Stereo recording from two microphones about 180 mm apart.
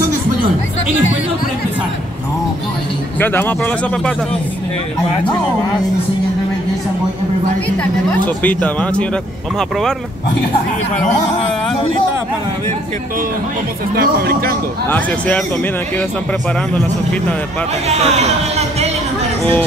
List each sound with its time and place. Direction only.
3.2 s a man's voice: 10° left (ahead or behind)
8.4 s a man's voice: 10° left (ahead or behind)
13.9 s speech: 55° right (ahead or behind)
14.9 s a man's voice: 10° left (ahead or behind)
16.7 s a man's voice: 5° left (ahead or behind)
17.8 s speech: 35° right (ahead or behind)